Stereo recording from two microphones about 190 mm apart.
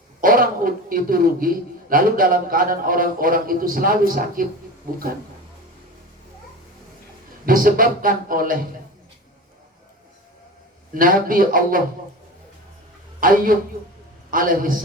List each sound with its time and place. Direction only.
0.2 s a woman's voice: 50° right (ahead or behind)
7.4 s speech: 45° right (ahead or behind)
10.9 s speech: 45° right (ahead or behind)
13.1 s speech: 45° right (ahead or behind)